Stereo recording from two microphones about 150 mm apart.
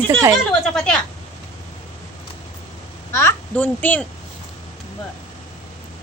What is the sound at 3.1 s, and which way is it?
Speech, 15° left (ahead or behind).